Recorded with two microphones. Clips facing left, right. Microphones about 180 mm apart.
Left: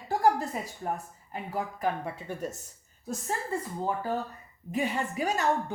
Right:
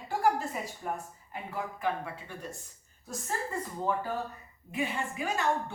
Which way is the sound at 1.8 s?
45° left (ahead or behind).